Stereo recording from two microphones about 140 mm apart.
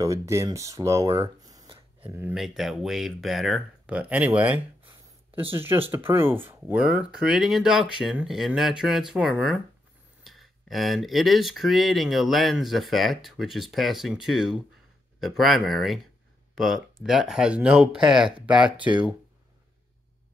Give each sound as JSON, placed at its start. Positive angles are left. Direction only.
{"t": 0.0, "sound": "speech", "side_deg": -20}
{"t": 2.0, "sound": "speech", "side_deg": -15}
{"t": 2.3, "sound": "speech", "side_deg": 0}
{"t": 18.8, "sound": "speech", "side_deg": -35}